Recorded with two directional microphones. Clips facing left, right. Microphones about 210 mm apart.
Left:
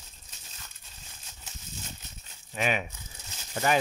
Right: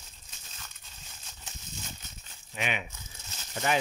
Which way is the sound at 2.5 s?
40° left (ahead or behind).